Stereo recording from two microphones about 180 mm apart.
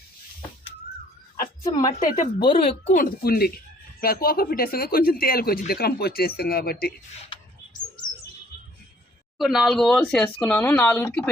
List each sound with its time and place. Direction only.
1.6 s speech: 20° left (ahead or behind)
2.9 s speech: 55° left (ahead or behind)
9.4 s speech: centre (ahead or behind)